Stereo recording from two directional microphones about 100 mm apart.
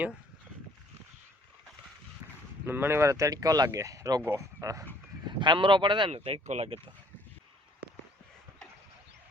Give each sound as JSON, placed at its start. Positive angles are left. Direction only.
{"t": 2.6, "sound": "speech", "side_deg": -20}
{"t": 5.4, "sound": "speech", "side_deg": -55}
{"t": 6.1, "sound": "speech", "side_deg": -85}